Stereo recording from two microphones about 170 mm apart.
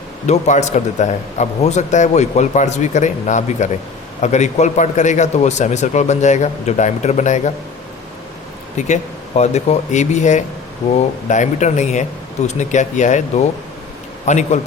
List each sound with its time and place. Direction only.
0.3 s a man's voice: 45° left (ahead or behind)
8.9 s a man's voice: 40° left (ahead or behind)